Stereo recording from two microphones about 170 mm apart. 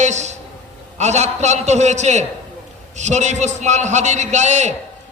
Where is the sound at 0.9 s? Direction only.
40° right (ahead or behind).